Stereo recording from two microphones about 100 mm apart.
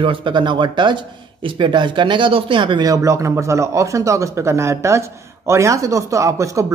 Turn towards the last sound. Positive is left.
turn(degrees=-30)  # may be behind; listen again after turning